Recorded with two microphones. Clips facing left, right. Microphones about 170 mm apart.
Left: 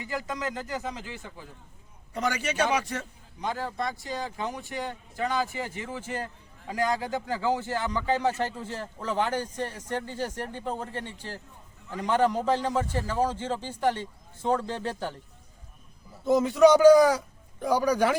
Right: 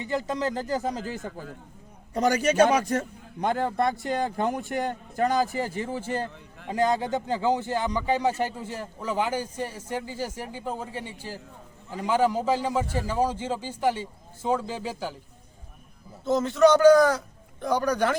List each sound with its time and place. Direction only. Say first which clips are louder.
0.0 s a man's voice: right 5 dB; 25° right (ahead or behind); by 15.2 s 5° right (ahead or behind)
16.2 s a man's voice: left 1 dB; 10° left (ahead or behind)